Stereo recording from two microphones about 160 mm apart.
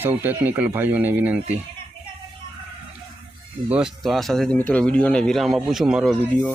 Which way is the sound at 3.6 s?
5° right (ahead or behind).